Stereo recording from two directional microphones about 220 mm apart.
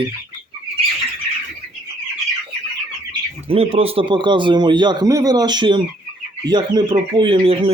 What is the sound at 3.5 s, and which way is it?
A man's voice, 25° right (ahead or behind).